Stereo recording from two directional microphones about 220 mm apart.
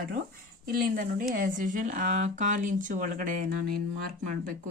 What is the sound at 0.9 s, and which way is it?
Speech, 40° right (ahead or behind).